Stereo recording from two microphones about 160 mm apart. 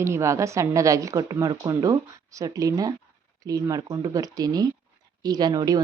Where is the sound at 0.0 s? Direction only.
20° right (ahead or behind).